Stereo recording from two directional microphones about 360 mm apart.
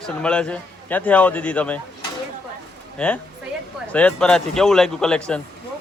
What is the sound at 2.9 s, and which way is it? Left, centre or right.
A man's voice, centre.